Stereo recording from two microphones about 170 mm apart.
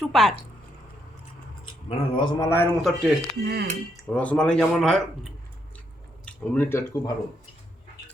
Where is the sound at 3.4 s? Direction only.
70° right (ahead or behind).